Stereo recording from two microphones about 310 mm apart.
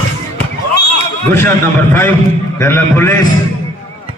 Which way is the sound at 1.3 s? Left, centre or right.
Centre.